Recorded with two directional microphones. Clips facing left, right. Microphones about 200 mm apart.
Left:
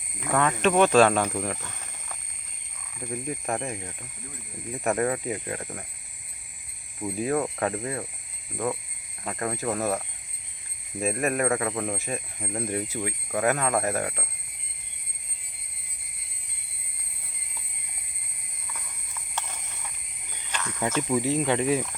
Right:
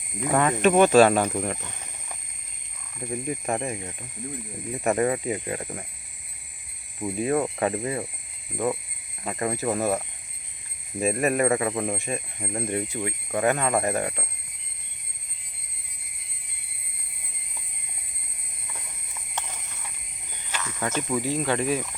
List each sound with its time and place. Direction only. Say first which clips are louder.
0.3 s speech: right 3 dB; 15° right (ahead or behind)
3.0 s speech: right 2 dB; 5° right (ahead or behind)
7.2 s speech: right 2 dB; 5° right (ahead or behind)
11.0 s speech: right 3 dB; centre (ahead or behind)
20.5 s snake: even; 5° right (ahead or behind)
21.2 s speech: left 1 dB; 25° left (ahead or behind)